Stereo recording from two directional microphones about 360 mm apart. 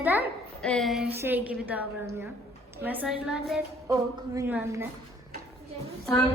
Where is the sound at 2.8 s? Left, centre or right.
Centre.